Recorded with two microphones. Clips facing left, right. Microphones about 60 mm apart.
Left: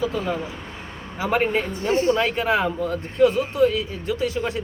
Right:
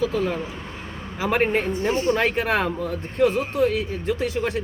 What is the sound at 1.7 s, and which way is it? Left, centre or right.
Speech, right.